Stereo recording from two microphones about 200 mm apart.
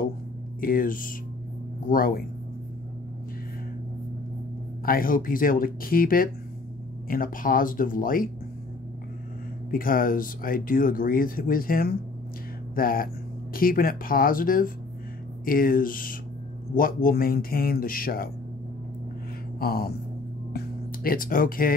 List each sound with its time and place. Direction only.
0.6 s speech: 45° left (ahead or behind)
4.8 s speech: 45° left (ahead or behind)
9.7 s speech: 45° left (ahead or behind)
19.6 s speech: 50° left (ahead or behind)